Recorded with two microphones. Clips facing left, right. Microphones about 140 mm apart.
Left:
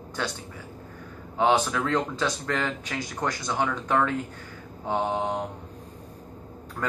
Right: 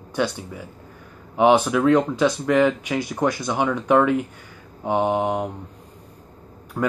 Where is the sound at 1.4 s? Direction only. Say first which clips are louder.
Right 6 dB; 15° right (ahead or behind).